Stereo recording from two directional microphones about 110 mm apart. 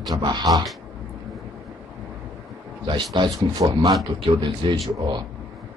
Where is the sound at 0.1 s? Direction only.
40° right (ahead or behind).